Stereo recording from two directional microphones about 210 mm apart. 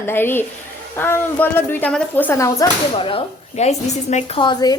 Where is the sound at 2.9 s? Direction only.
25° left (ahead or behind).